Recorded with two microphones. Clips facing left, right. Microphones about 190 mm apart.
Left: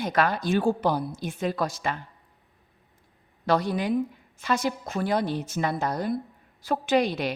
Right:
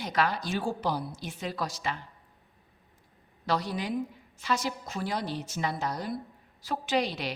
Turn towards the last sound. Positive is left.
turn(degrees=55)  # may be behind; listen again after turning